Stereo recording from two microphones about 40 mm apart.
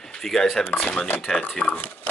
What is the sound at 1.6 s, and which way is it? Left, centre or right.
Speech, left.